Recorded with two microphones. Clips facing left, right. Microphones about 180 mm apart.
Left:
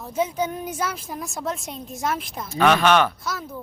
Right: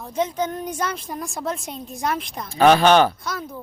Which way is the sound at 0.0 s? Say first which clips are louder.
Right 1 dB; 5° left (ahead or behind).